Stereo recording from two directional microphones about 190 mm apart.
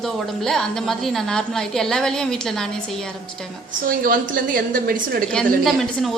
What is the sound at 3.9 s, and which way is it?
A woman's voice, 50° right (ahead or behind).